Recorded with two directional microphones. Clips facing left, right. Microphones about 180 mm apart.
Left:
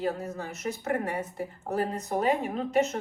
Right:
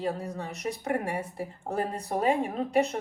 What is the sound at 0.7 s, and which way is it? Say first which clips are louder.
A woman's voice: even; 30° right (ahead or behind).